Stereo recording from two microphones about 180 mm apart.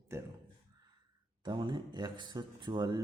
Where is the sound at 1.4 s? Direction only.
25° right (ahead or behind).